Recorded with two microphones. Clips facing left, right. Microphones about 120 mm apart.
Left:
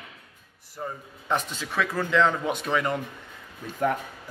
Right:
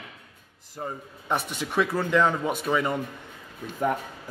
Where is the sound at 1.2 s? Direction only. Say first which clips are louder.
Even; 15° right (ahead or behind).